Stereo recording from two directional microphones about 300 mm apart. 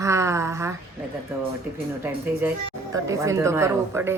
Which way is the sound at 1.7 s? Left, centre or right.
Centre.